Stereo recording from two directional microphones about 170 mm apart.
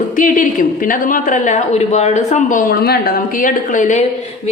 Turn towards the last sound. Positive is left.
turn(degrees=50)  # may be behind; listen again after turning